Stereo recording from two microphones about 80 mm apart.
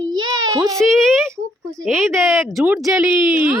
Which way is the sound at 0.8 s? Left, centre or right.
Centre.